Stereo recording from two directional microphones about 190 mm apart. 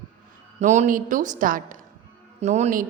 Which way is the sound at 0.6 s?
40° right (ahead or behind).